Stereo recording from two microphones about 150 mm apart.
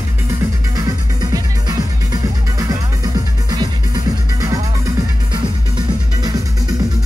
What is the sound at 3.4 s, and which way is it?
Music, 25° right (ahead or behind).